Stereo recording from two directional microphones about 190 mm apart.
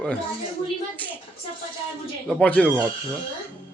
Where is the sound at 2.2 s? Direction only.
5° left (ahead or behind).